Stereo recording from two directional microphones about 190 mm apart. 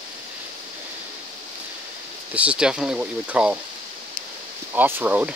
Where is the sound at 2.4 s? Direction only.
5° right (ahead or behind).